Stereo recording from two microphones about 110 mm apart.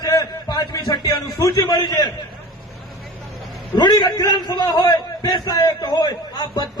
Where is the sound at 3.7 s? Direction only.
40° left (ahead or behind).